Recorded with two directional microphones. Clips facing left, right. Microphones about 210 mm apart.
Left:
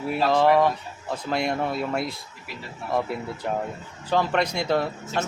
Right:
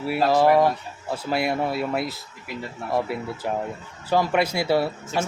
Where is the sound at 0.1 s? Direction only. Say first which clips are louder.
Right 1 dB; 5° right (ahead or behind).